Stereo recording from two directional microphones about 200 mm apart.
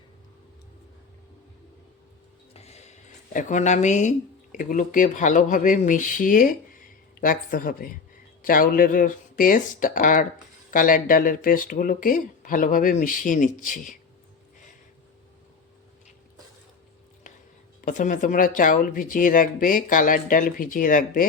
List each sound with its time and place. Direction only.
2.5 s a sound: 30° left (ahead or behind)
4.5 s speech: 40° left (ahead or behind)
17.7 s speech: 40° left (ahead or behind)